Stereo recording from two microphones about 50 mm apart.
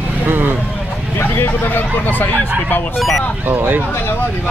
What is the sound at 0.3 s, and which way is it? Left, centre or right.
Vehicle, right.